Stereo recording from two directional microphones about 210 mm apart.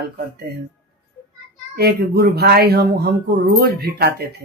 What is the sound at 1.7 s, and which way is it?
Speech, 50° right (ahead or behind).